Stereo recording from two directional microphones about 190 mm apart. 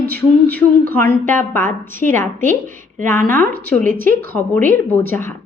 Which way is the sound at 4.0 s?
50° right (ahead or behind).